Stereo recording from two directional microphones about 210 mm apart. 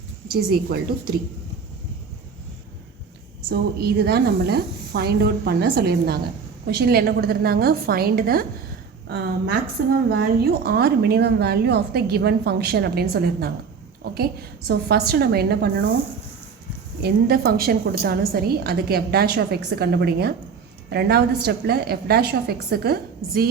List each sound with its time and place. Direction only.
0.5 s a woman's voice: 50° right (ahead or behind)
3.5 s a woman's voice: 50° right (ahead or behind)
17.0 s a woman's voice: 45° right (ahead or behind)